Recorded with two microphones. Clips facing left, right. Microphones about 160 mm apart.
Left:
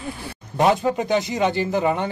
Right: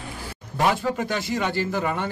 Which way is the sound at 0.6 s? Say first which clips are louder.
Left 4 dB; 20° left (ahead or behind).